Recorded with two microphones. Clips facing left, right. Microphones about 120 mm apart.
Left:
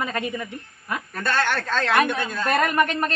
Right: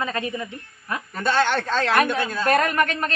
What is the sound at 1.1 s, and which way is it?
A man's voice, 15° right (ahead or behind).